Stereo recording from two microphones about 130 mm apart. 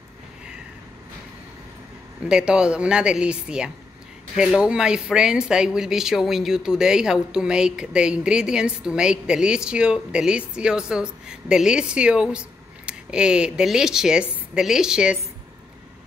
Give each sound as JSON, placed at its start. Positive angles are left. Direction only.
{"t": 2.2, "sound": "speech", "side_deg": -5}